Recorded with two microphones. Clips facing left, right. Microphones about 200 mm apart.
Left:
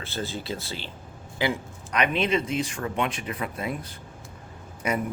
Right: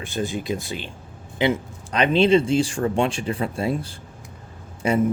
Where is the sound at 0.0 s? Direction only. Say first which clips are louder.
Right 6 dB; 15° right (ahead or behind).